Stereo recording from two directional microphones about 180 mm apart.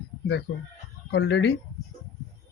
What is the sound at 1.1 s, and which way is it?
Speech, 65° left (ahead or behind).